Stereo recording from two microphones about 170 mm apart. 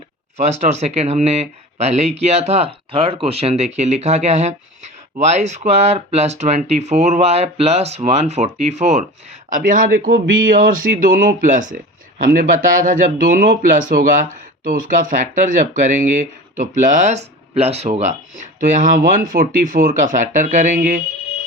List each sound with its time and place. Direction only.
0.3 s speech: 40° right (ahead or behind)
9.5 s speech: 50° right (ahead or behind)